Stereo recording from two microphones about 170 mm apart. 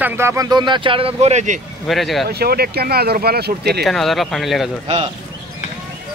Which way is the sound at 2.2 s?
65° right (ahead or behind).